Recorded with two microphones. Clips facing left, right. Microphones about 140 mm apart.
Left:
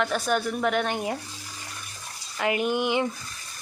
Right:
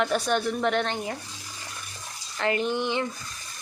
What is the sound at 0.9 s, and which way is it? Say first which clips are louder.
Speech: left 3 dB; 20° left (ahead or behind).